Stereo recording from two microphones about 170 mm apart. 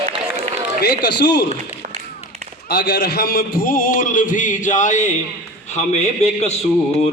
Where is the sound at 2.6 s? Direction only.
80° left; by 6.5 s 40° left (ahead or behind).